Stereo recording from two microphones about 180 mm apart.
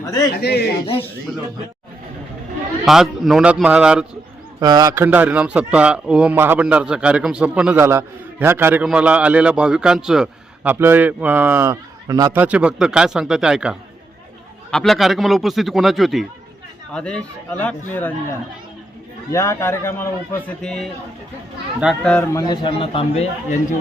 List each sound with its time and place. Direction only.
0.0 s speech: 20° left (ahead or behind)
0.3 s speech: 65° left (ahead or behind)
1.3 s speech: centre (ahead or behind)
2.8 s speech: centre (ahead or behind)
4.6 s a man's voice: 20° right (ahead or behind); by 18.1 s 10° left (ahead or behind)
19.3 s a man's voice: 15° left (ahead or behind)
20.6 s speech: centre (ahead or behind)
22.1 s a man's voice: 15° left (ahead or behind); by 23.6 s 35° left (ahead or behind)